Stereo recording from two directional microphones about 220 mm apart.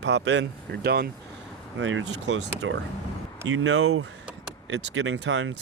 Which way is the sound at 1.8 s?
60° right (ahead or behind).